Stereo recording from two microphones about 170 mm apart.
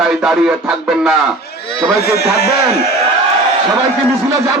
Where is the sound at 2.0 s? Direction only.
70° left (ahead or behind).